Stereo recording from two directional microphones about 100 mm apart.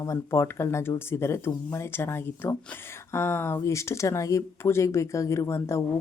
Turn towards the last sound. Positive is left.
turn(degrees=25)  # may be behind; listen again after turning